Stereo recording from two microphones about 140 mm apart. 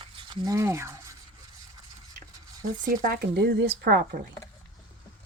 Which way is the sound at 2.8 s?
90° right.